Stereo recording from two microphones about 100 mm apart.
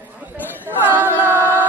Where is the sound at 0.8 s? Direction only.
20° right (ahead or behind).